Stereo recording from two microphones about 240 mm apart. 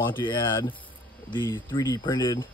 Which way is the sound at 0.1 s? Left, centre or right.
Centre.